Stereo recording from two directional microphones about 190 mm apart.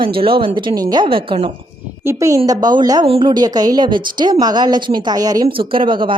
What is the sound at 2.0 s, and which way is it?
A woman's voice, 15° right (ahead or behind).